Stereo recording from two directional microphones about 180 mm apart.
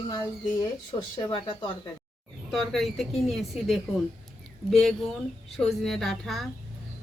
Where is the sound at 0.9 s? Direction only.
25° left (ahead or behind).